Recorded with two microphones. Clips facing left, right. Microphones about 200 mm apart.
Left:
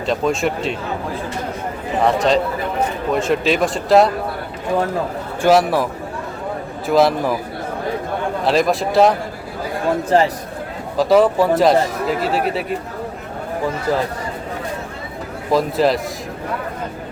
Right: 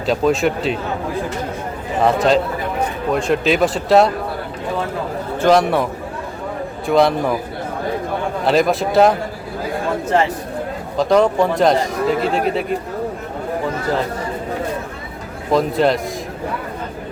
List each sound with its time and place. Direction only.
0.0 s speech: centre (ahead or behind)
2.0 s speech: centre (ahead or behind)
5.4 s speech: 5° left (ahead or behind)
8.4 s speech: centre (ahead or behind)
10.1 s a man's voice: 35° left (ahead or behind)
10.9 s speech: 5° left (ahead or behind)
15.5 s speech: centre (ahead or behind)